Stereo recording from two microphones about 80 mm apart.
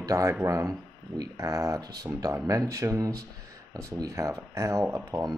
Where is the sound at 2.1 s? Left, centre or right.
Right.